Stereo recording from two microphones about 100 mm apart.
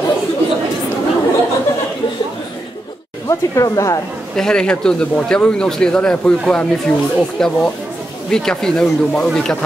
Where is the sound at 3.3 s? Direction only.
30° left (ahead or behind).